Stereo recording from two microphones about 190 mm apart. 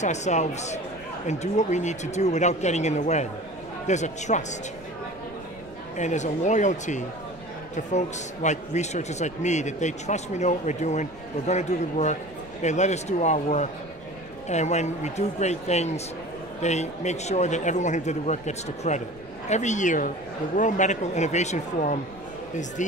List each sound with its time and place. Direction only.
0.0 s a man's voice: 35° left (ahead or behind)
5.9 s a man's voice: 40° left (ahead or behind)